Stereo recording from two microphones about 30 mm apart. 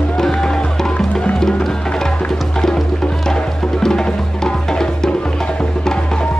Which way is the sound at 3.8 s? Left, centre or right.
Left.